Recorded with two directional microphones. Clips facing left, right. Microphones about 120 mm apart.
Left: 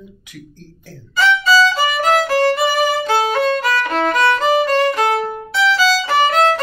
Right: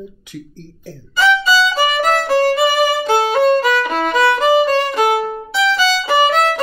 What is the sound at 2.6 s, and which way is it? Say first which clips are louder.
Violin: right 2 dB; 15° right (ahead or behind).